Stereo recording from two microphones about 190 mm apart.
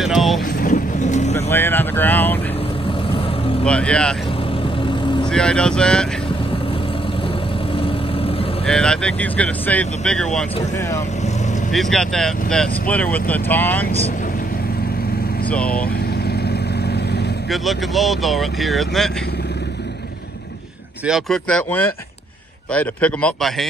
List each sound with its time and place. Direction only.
0.0 s boat: centre (ahead or behind)
0.6 s vehicle: 45° left (ahead or behind)
1.3 s speech: 10° left (ahead or behind)
3.6 s speech: 5° left (ahead or behind)
5.3 s speech: 5° left (ahead or behind)
8.6 s speech: 5° left (ahead or behind)
11.7 s speech: centre (ahead or behind)
15.5 s speech: 5° left (ahead or behind)
16.4 s vehicle: 60° left (ahead or behind)
17.5 s speech: centre (ahead or behind)
21.0 s speech: centre (ahead or behind)